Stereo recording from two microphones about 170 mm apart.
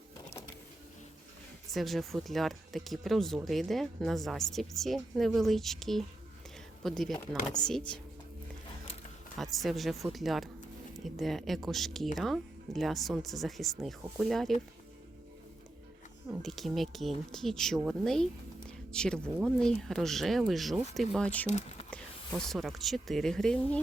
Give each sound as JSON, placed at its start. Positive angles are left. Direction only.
{"t": 1.7, "sound": "speech", "side_deg": 0}
{"t": 9.4, "sound": "speech", "side_deg": 0}
{"t": 16.4, "sound": "speech", "side_deg": 0}
{"t": 21.5, "sound": "a sound", "side_deg": 40}
{"t": 21.8, "sound": "a woman's voice", "side_deg": 5}